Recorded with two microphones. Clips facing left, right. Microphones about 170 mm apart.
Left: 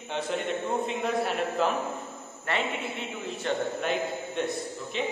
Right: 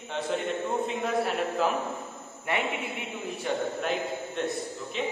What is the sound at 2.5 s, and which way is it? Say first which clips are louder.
Speech: even; 15° right (ahead or behind).